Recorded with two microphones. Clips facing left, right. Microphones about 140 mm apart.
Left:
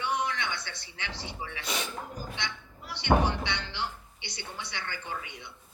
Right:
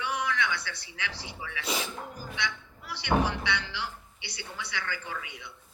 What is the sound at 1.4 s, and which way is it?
Speech, 30° left (ahead or behind).